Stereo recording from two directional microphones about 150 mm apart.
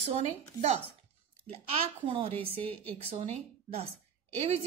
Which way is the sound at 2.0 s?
40° right (ahead or behind).